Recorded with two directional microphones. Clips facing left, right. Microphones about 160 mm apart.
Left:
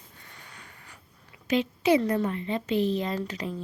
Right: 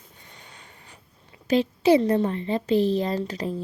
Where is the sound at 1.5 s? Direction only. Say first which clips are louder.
Right 4 dB; 35° right (ahead or behind).